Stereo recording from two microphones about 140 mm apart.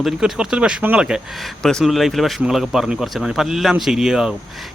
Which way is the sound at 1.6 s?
5° left (ahead or behind).